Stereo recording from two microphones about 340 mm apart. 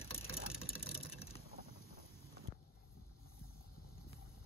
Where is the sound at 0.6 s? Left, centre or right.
Centre.